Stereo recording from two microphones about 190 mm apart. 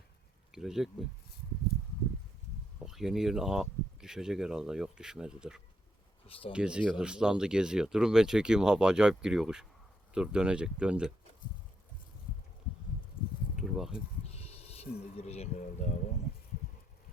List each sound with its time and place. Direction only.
0.5 s speech: centre (ahead or behind)
2.7 s speech: centre (ahead or behind)
6.2 s speech: 30° left (ahead or behind)
6.5 s speech: 5° right (ahead or behind)
13.6 s a sound: 5° right (ahead or behind)
14.3 s speech: 30° left (ahead or behind)